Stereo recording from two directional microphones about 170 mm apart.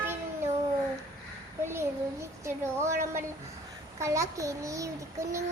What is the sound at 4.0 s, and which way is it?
A child's voice, 20° right (ahead or behind).